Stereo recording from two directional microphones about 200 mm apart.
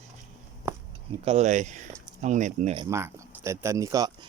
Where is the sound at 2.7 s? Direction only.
15° right (ahead or behind).